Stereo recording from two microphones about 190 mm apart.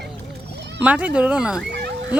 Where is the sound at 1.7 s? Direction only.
65° right (ahead or behind).